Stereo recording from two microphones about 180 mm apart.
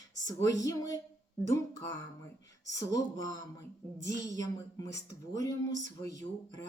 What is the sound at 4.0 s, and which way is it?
Speech, 45° right (ahead or behind).